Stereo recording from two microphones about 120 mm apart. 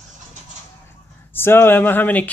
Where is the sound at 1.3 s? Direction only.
20° left (ahead or behind).